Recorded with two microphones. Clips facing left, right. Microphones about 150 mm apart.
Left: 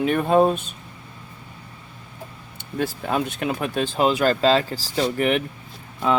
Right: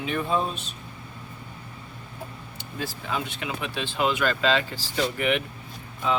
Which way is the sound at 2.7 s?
55° left (ahead or behind).